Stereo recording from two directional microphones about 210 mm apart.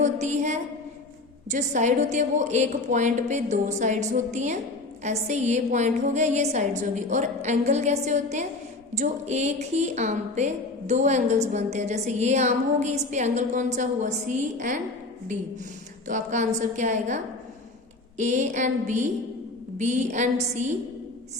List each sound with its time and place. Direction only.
0.0 s a woman's voice: 35° right (ahead or behind)
16.0 s a woman's voice: 35° right (ahead or behind)
18.2 s a woman's voice: 35° right (ahead or behind)